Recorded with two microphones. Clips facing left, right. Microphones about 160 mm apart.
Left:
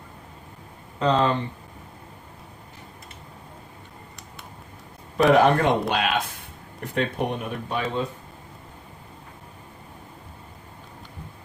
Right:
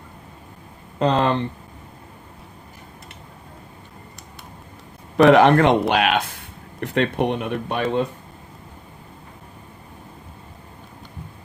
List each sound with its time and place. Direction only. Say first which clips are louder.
0.9 s speech: right 2 dB; 65° right (ahead or behind)
5.1 s speech: right 5 dB; 75° right (ahead or behind)